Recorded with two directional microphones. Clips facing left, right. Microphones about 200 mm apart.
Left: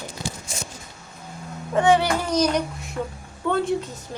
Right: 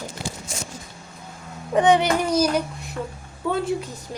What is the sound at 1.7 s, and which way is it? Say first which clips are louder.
A woman's voice: right 1 dB; 20° right (ahead or behind).